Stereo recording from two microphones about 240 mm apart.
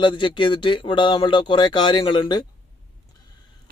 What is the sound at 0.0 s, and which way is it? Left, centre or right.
A man's voice, centre.